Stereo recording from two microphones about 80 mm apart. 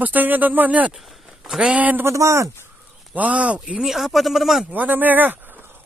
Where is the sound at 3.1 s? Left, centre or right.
Centre.